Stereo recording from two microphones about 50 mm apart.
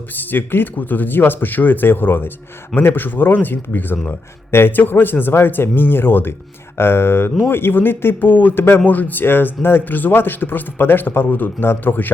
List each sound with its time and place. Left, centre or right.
0.1 s a man's voice: left